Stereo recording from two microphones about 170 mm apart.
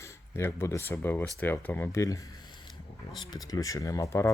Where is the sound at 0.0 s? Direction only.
15° left (ahead or behind).